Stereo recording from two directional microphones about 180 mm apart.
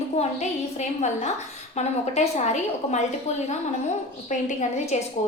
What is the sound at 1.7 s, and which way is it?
A woman's voice, 40° left (ahead or behind).